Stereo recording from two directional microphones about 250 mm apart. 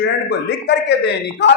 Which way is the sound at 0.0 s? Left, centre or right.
Left.